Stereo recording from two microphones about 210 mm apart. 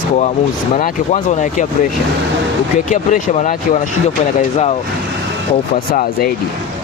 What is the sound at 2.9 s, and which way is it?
Speech, 40° left (ahead or behind).